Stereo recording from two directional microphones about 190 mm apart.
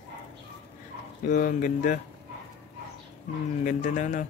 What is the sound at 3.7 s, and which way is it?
Speech, 40° left (ahead or behind).